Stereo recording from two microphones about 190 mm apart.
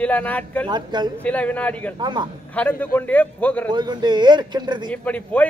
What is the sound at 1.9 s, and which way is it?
Speech, 25° right (ahead or behind).